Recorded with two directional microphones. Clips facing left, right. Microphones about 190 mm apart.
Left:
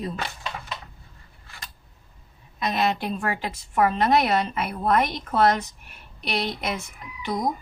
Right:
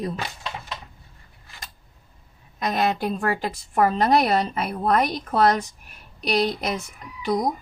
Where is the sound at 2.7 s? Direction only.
40° right (ahead or behind).